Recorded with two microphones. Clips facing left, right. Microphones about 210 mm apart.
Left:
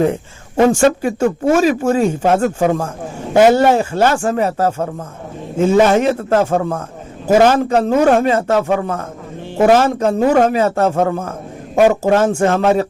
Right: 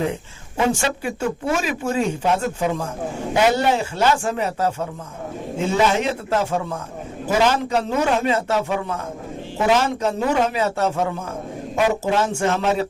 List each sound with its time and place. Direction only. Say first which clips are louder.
0.0 s speech: left 8 dB; 50° left (ahead or behind)